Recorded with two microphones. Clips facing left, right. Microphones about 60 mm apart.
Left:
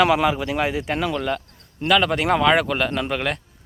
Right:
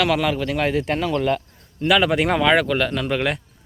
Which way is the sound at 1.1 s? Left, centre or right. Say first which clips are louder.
Right 4 dB; centre.